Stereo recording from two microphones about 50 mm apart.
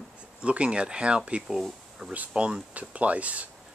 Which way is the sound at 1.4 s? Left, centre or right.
Centre.